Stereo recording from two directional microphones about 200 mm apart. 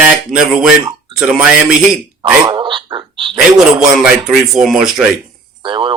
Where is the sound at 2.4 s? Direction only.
25° right (ahead or behind).